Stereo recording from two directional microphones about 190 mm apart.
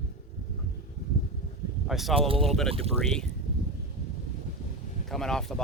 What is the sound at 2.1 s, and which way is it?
Speech, 30° right (ahead or behind).